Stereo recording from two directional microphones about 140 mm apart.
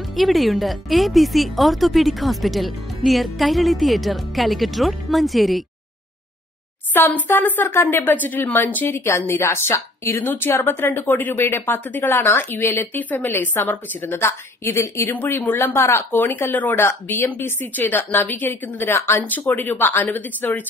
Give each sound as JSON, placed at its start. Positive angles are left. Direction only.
{"t": 0.1, "sound": "speech", "side_deg": 0}
{"t": 6.9, "sound": "speech", "side_deg": 15}